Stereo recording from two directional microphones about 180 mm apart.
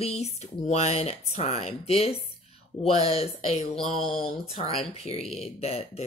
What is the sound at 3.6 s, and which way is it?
Speech, 30° left (ahead or behind).